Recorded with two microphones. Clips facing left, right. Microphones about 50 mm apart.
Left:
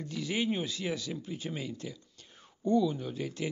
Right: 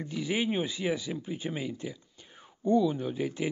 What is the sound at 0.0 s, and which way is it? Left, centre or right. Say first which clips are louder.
A man's voice: right 2 dB; centre.